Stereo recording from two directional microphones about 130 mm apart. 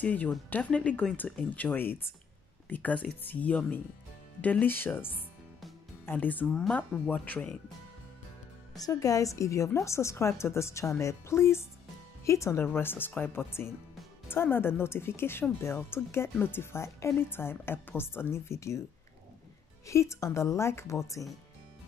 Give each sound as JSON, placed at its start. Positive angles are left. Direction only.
{"t": 0.0, "sound": "speech", "side_deg": 10}
{"t": 8.7, "sound": "a woman's voice", "side_deg": 25}
{"t": 19.9, "sound": "a woman's voice", "side_deg": 20}